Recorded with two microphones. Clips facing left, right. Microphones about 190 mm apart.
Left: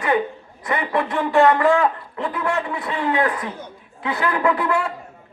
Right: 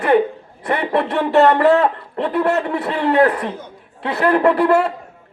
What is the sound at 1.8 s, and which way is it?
A man's voice, 65° right (ahead or behind).